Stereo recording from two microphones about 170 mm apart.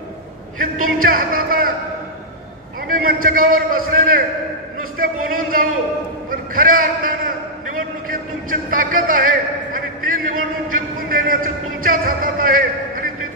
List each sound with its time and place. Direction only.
0.6 s a man's voice: 55° right (ahead or behind)
2.9 s a man's voice: 55° right (ahead or behind)